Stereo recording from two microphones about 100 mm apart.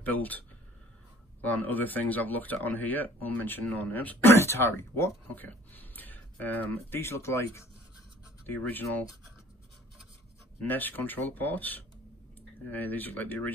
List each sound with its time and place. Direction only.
0.0 s speech: 15° left (ahead or behind)
8.5 s speech: 20° left (ahead or behind)
10.6 s speech: 20° left (ahead or behind)